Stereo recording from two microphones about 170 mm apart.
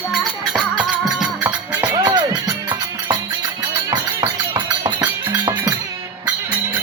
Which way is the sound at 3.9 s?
25° right (ahead or behind).